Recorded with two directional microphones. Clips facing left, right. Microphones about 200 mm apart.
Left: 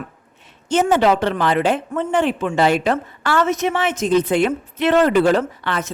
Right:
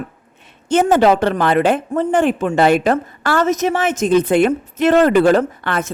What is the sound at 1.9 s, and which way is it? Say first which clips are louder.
A woman's voice: right 4 dB; 40° right (ahead or behind).